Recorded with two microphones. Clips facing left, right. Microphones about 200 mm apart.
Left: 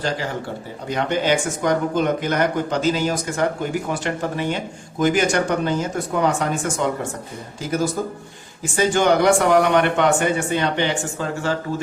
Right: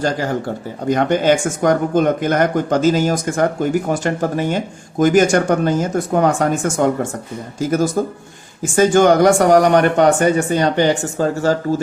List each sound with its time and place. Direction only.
0.0 s speech: 45° right (ahead or behind)